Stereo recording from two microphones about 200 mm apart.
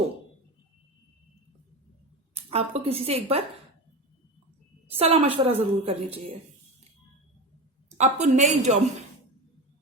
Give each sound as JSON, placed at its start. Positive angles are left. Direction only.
{"t": 2.3, "sound": "a woman's voice", "side_deg": -30}
{"t": 4.9, "sound": "a woman's voice", "side_deg": -30}
{"t": 7.9, "sound": "a woman's voice", "side_deg": -35}